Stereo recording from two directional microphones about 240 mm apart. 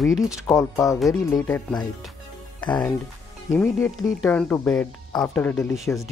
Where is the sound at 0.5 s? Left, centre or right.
Centre.